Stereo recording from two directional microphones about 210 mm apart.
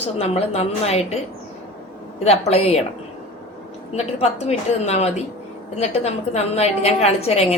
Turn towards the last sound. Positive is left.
turn(degrees=30)  # may be behind; listen again after turning